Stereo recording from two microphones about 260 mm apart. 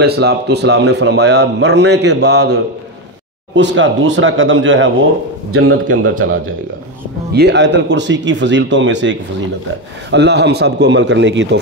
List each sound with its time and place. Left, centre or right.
0.0 s a man's voice: right
7.3 s speech: right
10.1 s speech: right